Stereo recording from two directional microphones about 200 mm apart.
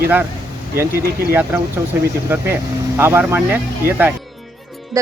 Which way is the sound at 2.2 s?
10° right (ahead or behind).